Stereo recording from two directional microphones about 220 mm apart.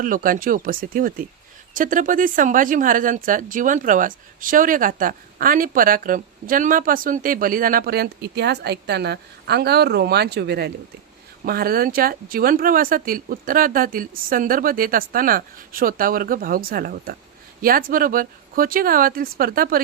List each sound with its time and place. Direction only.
0.0 s speech: 40° right (ahead or behind)